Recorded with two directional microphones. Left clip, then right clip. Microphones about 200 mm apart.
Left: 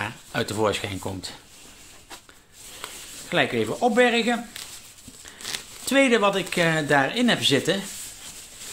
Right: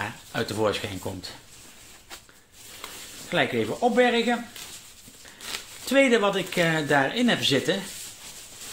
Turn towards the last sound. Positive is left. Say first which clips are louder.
# left 2 dB
turn(degrees=25)  # may be behind; listen again after turning